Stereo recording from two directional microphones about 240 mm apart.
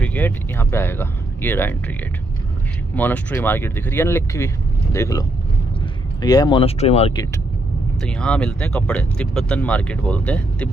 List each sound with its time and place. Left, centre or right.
0.0 s speech: centre
3.0 s speech: centre
6.2 s speech: centre
8.0 s speech: centre